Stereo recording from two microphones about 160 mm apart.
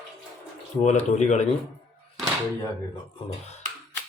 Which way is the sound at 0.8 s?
45° left (ahead or behind).